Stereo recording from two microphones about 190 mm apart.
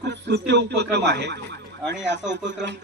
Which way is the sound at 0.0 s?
65° right (ahead or behind).